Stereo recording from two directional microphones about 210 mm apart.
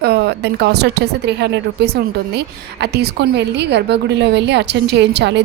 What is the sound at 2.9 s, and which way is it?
A woman's voice, 50° right (ahead or behind).